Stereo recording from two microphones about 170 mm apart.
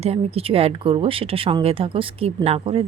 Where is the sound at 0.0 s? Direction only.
35° right (ahead or behind).